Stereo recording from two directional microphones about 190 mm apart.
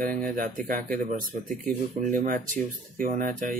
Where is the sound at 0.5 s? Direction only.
45° right (ahead or behind).